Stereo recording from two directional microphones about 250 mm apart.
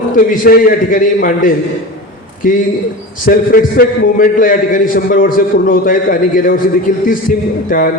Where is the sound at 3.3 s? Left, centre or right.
Left.